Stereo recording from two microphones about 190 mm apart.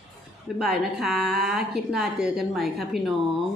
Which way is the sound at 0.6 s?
Centre (ahead or behind).